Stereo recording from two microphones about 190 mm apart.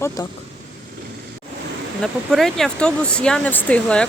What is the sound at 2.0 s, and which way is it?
Speech, centre (ahead or behind).